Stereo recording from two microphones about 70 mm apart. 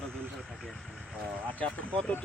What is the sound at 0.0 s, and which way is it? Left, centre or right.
Vehicle, centre.